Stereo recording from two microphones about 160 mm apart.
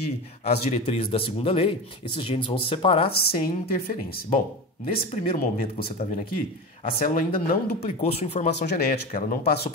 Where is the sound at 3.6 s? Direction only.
75° left (ahead or behind).